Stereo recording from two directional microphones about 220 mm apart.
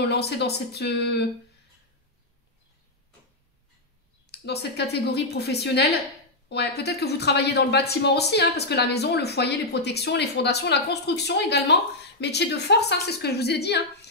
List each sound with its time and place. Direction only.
0.1 s speech: 50° left (ahead or behind)
4.3 s speech: 45° left (ahead or behind)